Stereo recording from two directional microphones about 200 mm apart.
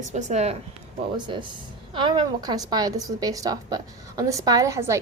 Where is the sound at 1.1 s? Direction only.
25° right (ahead or behind).